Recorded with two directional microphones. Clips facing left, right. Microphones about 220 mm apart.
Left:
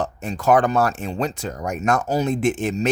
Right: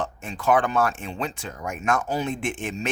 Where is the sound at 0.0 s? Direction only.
40° left (ahead or behind).